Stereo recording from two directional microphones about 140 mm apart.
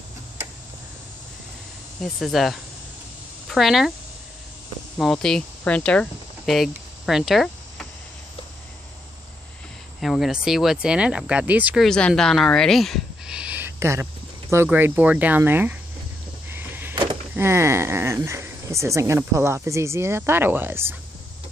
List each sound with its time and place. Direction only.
2.1 s speech: centre (ahead or behind)
4.9 s speech: 5° left (ahead or behind)
9.9 s speech: centre (ahead or behind)
11.8 s speech: centre (ahead or behind); by 15.8 s 15° right (ahead or behind)
16.4 s a sound: 15° right (ahead or behind)
16.9 s vehicle: 35° right (ahead or behind)
17.3 s speech: 15° right (ahead or behind)